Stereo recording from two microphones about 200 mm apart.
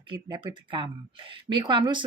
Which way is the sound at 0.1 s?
25° right (ahead or behind).